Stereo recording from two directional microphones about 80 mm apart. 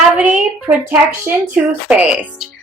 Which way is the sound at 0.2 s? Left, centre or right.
Centre.